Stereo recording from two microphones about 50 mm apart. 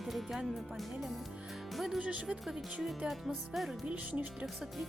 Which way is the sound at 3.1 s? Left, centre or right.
Centre.